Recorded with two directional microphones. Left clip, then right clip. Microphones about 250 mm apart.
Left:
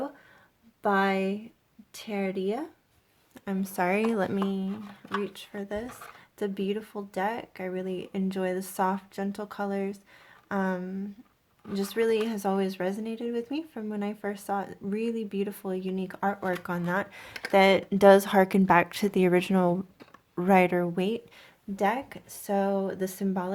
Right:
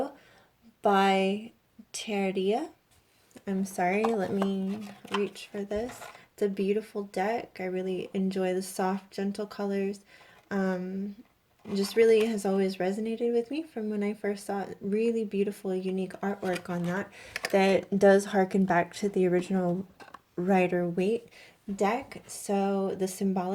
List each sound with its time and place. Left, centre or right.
0.8 s speech: centre
3.3 s speech: left